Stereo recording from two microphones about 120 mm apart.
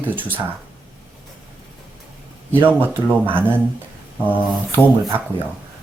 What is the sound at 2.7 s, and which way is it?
Speech, 15° right (ahead or behind).